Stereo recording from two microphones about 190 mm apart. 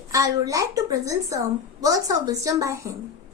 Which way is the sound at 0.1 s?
20° right (ahead or behind).